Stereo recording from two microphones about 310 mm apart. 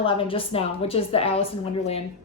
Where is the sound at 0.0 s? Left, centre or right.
Centre.